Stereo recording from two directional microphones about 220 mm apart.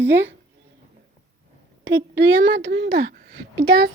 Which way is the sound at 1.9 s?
50° right (ahead or behind).